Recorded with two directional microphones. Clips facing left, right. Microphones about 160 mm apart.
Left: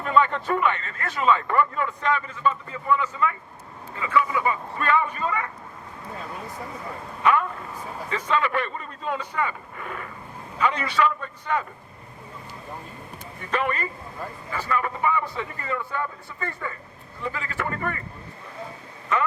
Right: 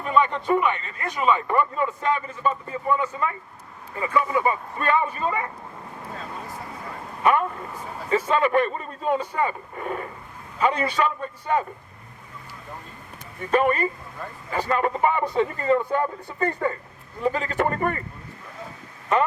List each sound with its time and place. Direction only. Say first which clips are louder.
0.0 s speech: even; 15° right (ahead or behind)
7.2 s a sound: right 1 dB; 40° right (ahead or behind)
8.3 s speech: right 3 dB; 45° right (ahead or behind)
13.5 s speech: right 6 dB; 35° right (ahead or behind)